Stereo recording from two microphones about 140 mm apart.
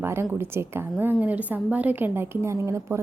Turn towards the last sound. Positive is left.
turn(degrees=-20)  # may be behind; listen again after turning